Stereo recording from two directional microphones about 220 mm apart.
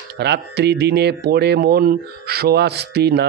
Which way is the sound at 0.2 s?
50° right (ahead or behind).